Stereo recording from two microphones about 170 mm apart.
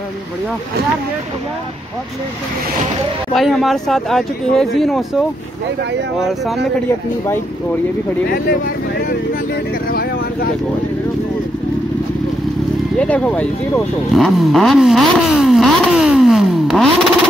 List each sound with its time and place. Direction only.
3.3 s speech: centre (ahead or behind)
6.1 s speech: centre (ahead or behind)
9.8 s vehicle: 60° left (ahead or behind)
13.0 s speech: 10° left (ahead or behind)
14.1 s vehicle: centre (ahead or behind)